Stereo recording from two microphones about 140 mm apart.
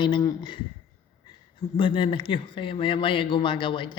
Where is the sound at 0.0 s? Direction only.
30° left (ahead or behind).